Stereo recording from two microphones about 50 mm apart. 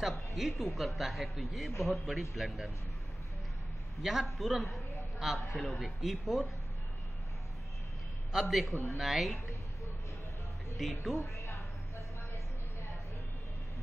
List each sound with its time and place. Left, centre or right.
0.0 s speech: centre
4.0 s speech: centre
8.3 s speech: centre
10.8 s speech: centre
11.3 s a sound: left